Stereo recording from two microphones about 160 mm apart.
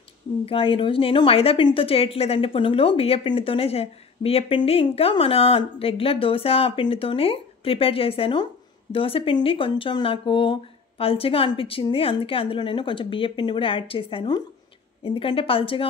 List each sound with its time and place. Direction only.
0.5 s a woman's voice: 35° left (ahead or behind)